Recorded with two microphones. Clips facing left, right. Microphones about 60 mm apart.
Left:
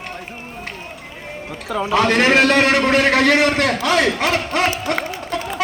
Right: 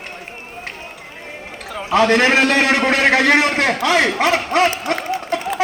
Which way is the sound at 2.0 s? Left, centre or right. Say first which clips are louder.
Left 1 dB; right.